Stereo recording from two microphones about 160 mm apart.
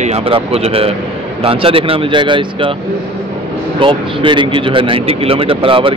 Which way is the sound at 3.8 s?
30° right (ahead or behind).